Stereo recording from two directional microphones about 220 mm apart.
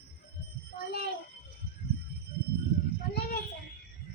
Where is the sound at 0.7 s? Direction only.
45° left (ahead or behind).